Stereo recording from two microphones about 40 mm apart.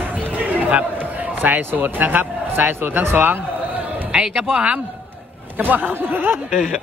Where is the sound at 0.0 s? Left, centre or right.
Right.